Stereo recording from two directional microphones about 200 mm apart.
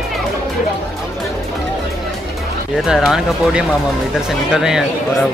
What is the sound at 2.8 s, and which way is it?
Speech, centre (ahead or behind).